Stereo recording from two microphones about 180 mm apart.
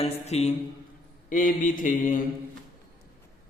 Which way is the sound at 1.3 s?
50° left (ahead or behind).